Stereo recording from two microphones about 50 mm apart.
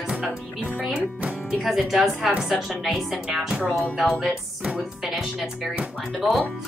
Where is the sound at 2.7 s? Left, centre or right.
Centre.